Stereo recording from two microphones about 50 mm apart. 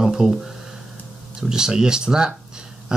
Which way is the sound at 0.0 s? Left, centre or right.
Centre.